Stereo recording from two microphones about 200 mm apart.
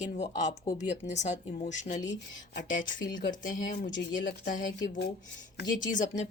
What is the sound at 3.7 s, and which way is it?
Speech, 55° left (ahead or behind).